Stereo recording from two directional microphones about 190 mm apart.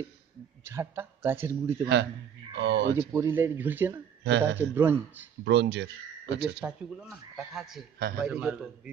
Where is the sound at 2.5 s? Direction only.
65° right (ahead or behind).